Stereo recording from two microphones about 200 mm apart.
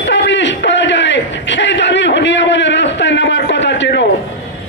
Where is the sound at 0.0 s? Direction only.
60° left (ahead or behind).